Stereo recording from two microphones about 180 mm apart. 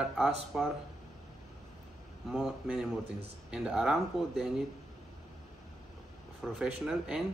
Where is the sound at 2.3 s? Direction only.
5° right (ahead or behind).